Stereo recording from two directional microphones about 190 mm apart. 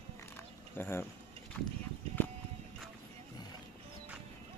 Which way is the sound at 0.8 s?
10° left (ahead or behind).